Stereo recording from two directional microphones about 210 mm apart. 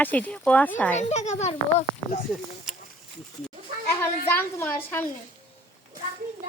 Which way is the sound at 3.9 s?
10° left (ahead or behind).